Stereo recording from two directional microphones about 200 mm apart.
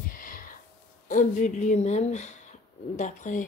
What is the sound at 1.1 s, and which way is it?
Speech, 40° left (ahead or behind).